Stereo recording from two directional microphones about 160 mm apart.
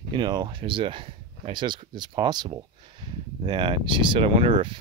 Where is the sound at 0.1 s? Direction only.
30° right (ahead or behind).